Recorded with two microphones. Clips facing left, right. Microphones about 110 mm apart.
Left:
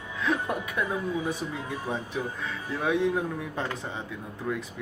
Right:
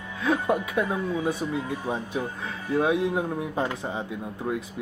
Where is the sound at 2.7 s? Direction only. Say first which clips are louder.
Right 3 dB; 20° right (ahead or behind).